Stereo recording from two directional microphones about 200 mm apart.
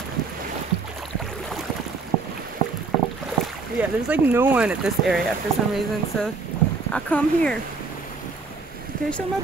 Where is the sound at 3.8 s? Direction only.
10° right (ahead or behind).